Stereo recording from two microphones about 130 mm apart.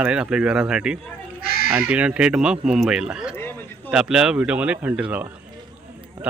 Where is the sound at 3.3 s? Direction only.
15° left (ahead or behind).